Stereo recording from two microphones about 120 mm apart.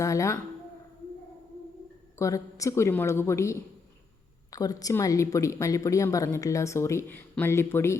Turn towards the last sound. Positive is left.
turn(degrees=20)  # may be behind; listen again after turning